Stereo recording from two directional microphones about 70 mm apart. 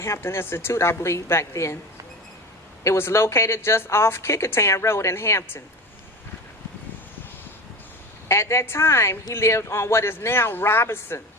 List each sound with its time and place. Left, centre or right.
0.0 s a woman's voice: left
2.8 s a woman's voice: left
8.3 s a woman's voice: left